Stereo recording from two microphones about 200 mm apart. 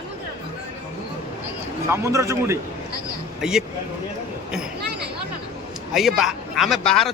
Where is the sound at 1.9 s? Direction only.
15° right (ahead or behind).